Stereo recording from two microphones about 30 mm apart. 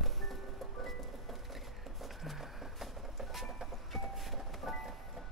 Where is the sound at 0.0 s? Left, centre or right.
Centre.